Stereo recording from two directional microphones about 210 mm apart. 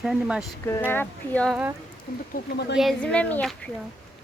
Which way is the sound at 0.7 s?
10° left (ahead or behind).